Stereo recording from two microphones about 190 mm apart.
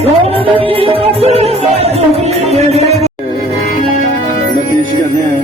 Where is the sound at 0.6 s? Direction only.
30° right (ahead or behind).